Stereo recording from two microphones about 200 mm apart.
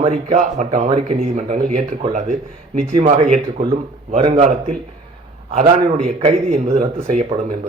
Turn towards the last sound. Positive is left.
turn(degrees=-35)  # may be behind; listen again after turning